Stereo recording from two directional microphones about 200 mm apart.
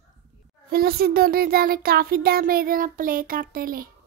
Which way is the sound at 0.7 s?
50° right (ahead or behind).